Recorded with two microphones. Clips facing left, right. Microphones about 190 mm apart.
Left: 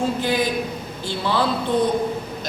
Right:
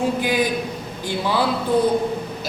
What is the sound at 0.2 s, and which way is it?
A woman's voice, 15° right (ahead or behind).